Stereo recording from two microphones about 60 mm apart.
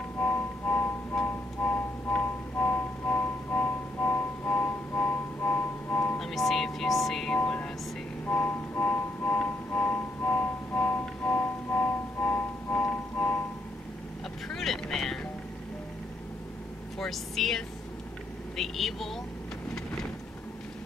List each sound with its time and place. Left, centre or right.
0.2 s music: left
6.1 s music: centre
7.3 s music: left
14.5 s vehicle: centre
17.0 s vehicle: centre